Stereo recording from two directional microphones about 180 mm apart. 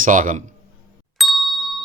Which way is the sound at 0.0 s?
45° right (ahead or behind).